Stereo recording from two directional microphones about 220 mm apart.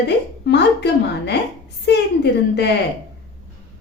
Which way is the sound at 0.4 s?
50° left (ahead or behind).